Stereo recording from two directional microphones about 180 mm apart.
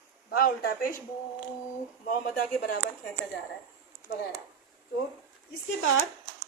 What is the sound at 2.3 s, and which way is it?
Speech, 50° left (ahead or behind).